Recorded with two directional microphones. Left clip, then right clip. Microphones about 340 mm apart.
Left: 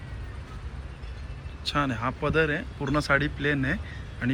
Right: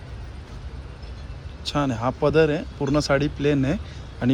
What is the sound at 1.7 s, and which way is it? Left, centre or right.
Speech, centre.